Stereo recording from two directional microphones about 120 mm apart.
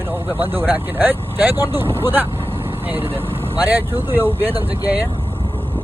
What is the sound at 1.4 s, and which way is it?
Speech, 20° right (ahead or behind).